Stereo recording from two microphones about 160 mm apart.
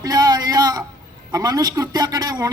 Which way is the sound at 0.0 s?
25° right (ahead or behind).